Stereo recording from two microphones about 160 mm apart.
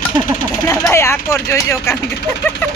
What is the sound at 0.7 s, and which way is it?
Speech, 15° left (ahead or behind).